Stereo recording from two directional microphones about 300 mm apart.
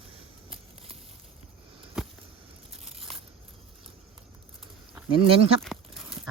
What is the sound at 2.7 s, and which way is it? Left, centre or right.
Biting, centre.